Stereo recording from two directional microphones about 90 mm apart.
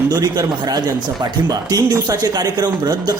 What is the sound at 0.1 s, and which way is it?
Speech, 45° right (ahead or behind).